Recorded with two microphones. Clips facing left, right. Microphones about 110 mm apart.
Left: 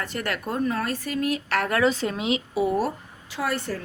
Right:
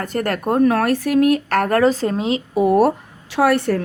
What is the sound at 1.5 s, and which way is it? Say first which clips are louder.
Speech: right 7 dB; 45° right (ahead or behind).